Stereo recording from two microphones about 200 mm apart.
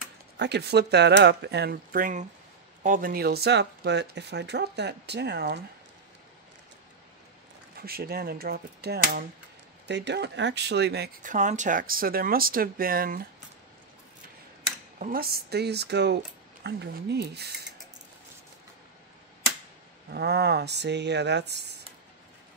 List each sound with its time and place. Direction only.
0.4 s speech: 55° right (ahead or behind)
7.8 s speech: 50° right (ahead or behind)
11.2 s speech: 40° right (ahead or behind)
15.0 s speech: 45° right (ahead or behind)
20.1 s speech: 55° right (ahead or behind)